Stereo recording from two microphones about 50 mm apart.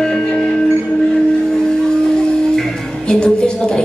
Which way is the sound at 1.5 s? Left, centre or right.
Centre.